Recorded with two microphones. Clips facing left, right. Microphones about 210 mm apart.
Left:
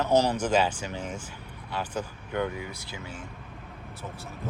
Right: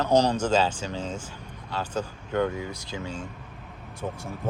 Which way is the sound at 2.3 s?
15° left (ahead or behind).